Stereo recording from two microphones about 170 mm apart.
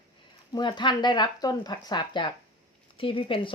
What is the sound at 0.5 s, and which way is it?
Speech, 25° left (ahead or behind).